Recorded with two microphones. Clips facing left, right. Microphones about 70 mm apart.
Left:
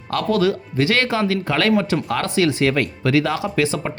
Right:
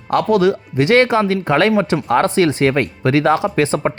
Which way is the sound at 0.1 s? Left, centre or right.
Right.